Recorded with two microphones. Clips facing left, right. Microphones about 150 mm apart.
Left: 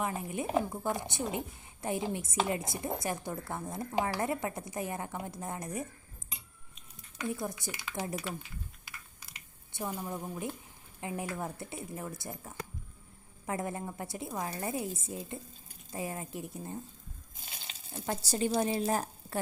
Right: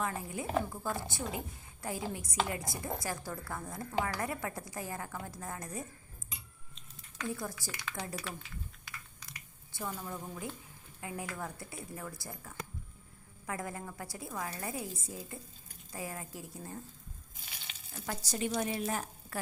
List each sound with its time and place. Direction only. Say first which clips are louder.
0.0 s a woman's voice: left 2 dB; 20° left (ahead or behind)
7.2 s a woman's voice: left 3 dB; 20° left (ahead or behind)
9.2 s squish: right 1 dB; 20° left (ahead or behind)
11.0 s a woman's voice: left 4 dB; 20° left (ahead or behind)
17.4 s speech: left 3 dB; 30° left (ahead or behind)